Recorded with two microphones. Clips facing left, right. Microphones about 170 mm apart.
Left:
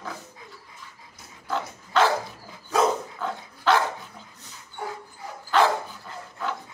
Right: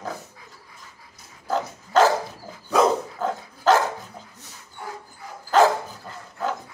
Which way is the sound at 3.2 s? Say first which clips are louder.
Right 4 dB; 45° right (ahead or behind).